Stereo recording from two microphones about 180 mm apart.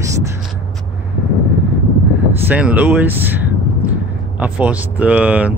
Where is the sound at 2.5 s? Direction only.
10° right (ahead or behind).